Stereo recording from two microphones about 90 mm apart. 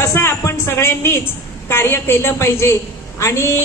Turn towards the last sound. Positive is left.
turn(degrees=30)  # may be behind; listen again after turning